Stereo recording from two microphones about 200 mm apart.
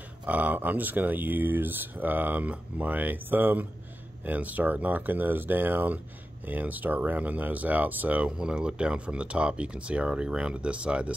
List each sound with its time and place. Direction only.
0.3 s speech: 10° right (ahead or behind)